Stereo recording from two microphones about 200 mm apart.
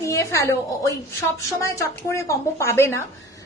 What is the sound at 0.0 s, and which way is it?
A woman's voice, 15° left (ahead or behind).